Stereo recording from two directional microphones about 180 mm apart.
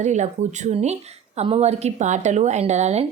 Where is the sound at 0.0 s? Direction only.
40° right (ahead or behind).